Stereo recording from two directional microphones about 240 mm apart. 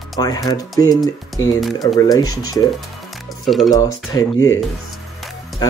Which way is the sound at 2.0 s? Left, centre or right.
Centre.